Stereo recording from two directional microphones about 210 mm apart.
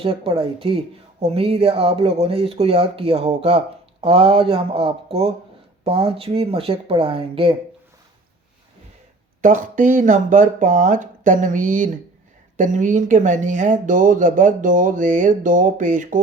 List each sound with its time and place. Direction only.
0.0 s speech: 25° right (ahead or behind)
9.4 s speech: 40° right (ahead or behind)